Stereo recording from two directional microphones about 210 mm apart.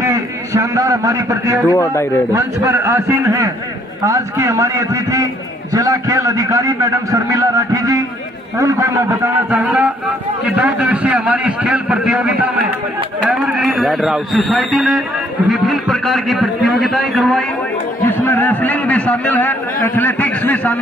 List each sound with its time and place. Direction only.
0.0 s a man's voice: 15° right (ahead or behind)
1.7 s a man's voice: 15° left (ahead or behind)
2.3 s a man's voice: 10° right (ahead or behind)
13.6 s a man's voice: centre (ahead or behind)
18.0 s a sound: 10° left (ahead or behind)
20.0 s a man's voice: 10° left (ahead or behind)